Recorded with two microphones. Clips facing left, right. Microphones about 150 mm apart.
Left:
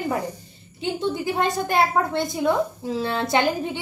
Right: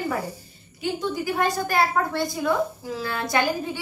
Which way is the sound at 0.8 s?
25° left (ahead or behind).